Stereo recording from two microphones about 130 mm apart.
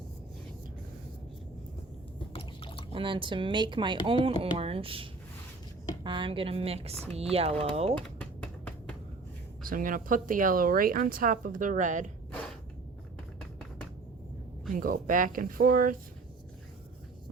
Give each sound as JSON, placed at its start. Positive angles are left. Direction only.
{"t": 2.3, "sound": "liquid", "side_deg": 45}
{"t": 2.9, "sound": "speech", "side_deg": -40}
{"t": 7.9, "sound": "a sound", "side_deg": 10}
{"t": 9.6, "sound": "speech", "side_deg": -90}
{"t": 14.8, "sound": "speech", "side_deg": -90}